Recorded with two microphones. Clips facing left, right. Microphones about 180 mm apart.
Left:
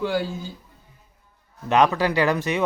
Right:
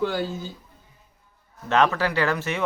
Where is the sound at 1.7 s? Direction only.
15° left (ahead or behind).